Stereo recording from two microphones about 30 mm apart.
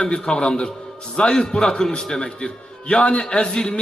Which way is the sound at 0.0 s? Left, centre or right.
Left.